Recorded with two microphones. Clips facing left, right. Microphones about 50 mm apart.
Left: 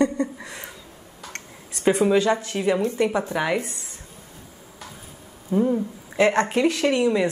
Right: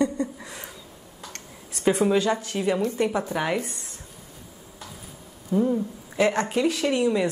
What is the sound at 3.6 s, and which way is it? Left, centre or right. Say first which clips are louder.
Speech: even; left.